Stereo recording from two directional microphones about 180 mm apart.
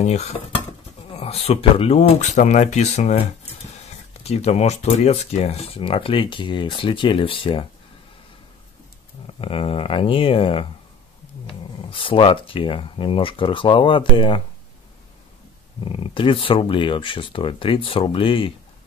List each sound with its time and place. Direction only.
0.0 s speech: 35° left (ahead or behind)
4.2 s speech: 35° left (ahead or behind)
9.4 s speech: 30° left (ahead or behind)
15.8 s speech: 30° left (ahead or behind)